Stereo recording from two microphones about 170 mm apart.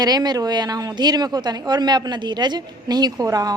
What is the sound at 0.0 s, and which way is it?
A woman's voice, 25° right (ahead or behind).